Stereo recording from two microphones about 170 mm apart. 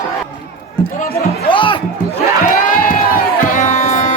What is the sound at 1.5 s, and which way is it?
Music, 30° left (ahead or behind).